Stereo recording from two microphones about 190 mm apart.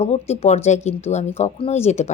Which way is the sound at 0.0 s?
35° left (ahead or behind).